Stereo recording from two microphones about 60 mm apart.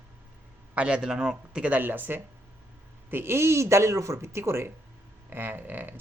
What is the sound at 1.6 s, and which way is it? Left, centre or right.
Speech, right.